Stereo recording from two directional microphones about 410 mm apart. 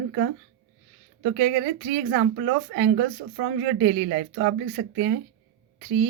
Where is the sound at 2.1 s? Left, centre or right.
Right.